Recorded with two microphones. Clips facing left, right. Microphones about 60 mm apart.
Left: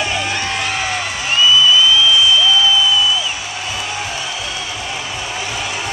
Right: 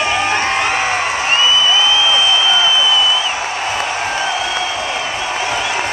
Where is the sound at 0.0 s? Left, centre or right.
Right.